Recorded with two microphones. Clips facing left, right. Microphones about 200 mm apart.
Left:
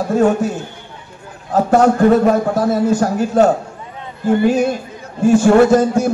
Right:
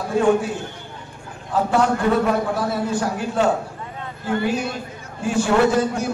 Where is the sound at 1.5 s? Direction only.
45° left (ahead or behind).